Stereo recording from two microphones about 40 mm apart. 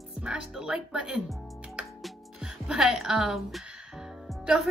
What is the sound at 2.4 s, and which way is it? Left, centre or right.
Speech, centre.